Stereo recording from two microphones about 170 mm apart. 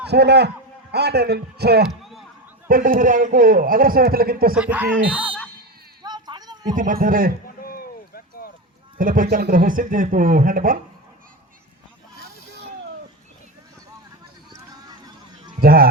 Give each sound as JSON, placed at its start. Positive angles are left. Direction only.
{"t": 0.1, "sound": "a man's voice", "side_deg": -75}
{"t": 1.9, "sound": "a sound", "side_deg": 0}
{"t": 2.6, "sound": "a man's voice", "side_deg": -55}
{"t": 4.6, "sound": "speech", "side_deg": -10}
{"t": 6.0, "sound": "a sound", "side_deg": -25}
{"t": 6.7, "sound": "a man's voice", "side_deg": -55}
{"t": 7.4, "sound": "basketball bounce", "side_deg": 60}
{"t": 9.0, "sound": "a man's voice", "side_deg": -55}
{"t": 14.5, "sound": "a sound", "side_deg": -20}
{"t": 15.6, "sound": "a man's voice", "side_deg": -60}